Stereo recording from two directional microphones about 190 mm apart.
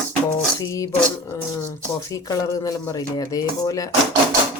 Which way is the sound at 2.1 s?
20° left (ahead or behind).